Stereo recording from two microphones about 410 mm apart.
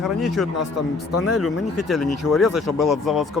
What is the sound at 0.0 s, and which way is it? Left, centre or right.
Speech, centre.